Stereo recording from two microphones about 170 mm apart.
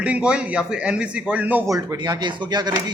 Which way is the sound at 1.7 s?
20° right (ahead or behind).